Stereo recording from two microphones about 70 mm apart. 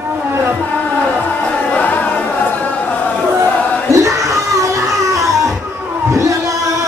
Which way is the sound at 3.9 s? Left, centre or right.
Right.